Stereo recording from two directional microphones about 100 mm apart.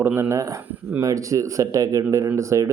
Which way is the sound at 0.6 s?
15° right (ahead or behind).